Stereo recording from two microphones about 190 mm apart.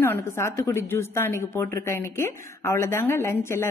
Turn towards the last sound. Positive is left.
turn(degrees=15)  # may be behind; listen again after turning